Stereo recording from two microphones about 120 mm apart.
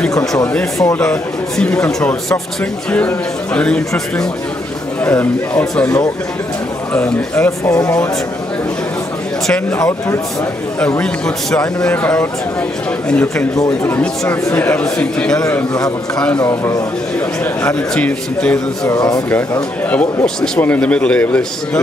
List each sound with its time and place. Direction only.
0.5 s speech: 10° left (ahead or behind)
9.8 s speech: 25° left (ahead or behind)
11.0 s speech: 10° left (ahead or behind)
16.3 s speech: 25° left (ahead or behind)
17.9 s speech: 10° left (ahead or behind)
18.9 s speech: 30° left (ahead or behind)
20.5 s speech: 15° left (ahead or behind)